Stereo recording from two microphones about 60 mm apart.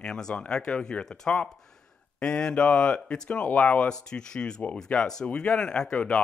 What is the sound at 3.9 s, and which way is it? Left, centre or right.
Speech, centre.